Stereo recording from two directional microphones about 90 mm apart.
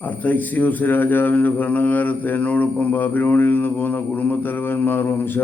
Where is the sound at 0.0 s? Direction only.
20° left (ahead or behind).